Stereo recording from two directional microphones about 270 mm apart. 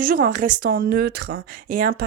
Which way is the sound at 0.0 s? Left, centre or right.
Right.